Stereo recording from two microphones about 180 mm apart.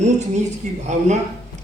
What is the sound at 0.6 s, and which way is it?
Speech, 40° right (ahead or behind).